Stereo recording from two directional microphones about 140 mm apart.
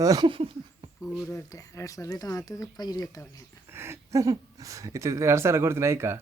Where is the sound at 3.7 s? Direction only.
15° right (ahead or behind).